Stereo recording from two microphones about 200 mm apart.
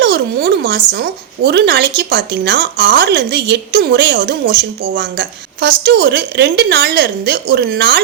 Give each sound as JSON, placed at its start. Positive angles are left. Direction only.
{"t": 0.0, "sound": "a woman's voice", "side_deg": -55}